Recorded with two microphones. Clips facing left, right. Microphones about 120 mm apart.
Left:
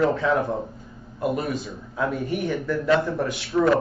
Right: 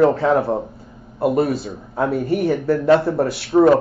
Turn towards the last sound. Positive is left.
turn(degrees=-35)  # may be behind; listen again after turning